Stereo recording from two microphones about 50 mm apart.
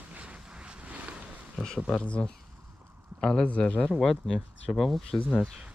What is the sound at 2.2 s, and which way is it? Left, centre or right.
Speech, centre.